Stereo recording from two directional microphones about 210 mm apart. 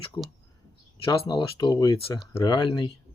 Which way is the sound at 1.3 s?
20° left (ahead or behind).